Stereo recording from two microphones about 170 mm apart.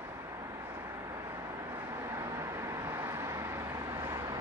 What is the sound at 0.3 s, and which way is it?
Vehicle, 15° right (ahead or behind).